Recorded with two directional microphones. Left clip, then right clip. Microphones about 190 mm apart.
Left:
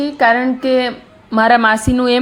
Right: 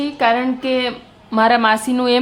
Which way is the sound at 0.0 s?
15° left (ahead or behind).